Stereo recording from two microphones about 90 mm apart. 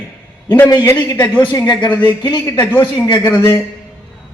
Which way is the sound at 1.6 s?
50° left (ahead or behind).